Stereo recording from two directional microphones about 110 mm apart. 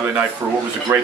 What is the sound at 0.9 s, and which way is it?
Speech, 20° right (ahead or behind).